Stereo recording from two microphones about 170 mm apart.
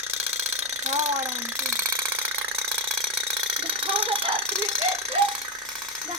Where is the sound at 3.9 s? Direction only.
30° right (ahead or behind).